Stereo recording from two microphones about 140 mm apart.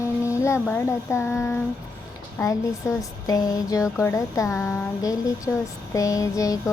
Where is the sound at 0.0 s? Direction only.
20° left (ahead or behind).